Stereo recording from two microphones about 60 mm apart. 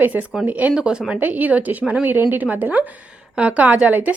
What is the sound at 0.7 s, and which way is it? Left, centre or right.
Speech, centre.